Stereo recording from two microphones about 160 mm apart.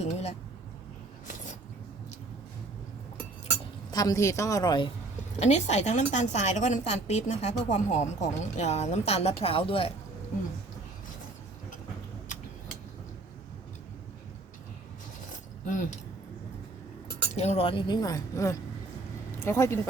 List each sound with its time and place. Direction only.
0.0 s a woman's voice: 40° left (ahead or behind)
3.9 s speech: 20° left (ahead or behind)
5.4 s a woman's voice: 45° left (ahead or behind)
15.6 s a woman's voice: 50° left (ahead or behind)
17.3 s speech: 45° left (ahead or behind); by 19.9 s 15° left (ahead or behind)